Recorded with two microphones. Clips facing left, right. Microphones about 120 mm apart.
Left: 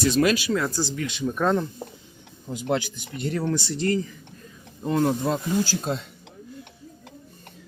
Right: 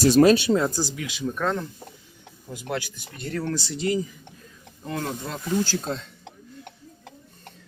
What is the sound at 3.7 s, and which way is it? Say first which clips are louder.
Speech: even; 5° right (ahead or behind).